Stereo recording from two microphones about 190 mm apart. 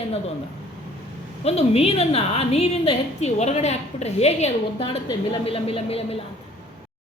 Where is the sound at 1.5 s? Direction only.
30° left (ahead or behind).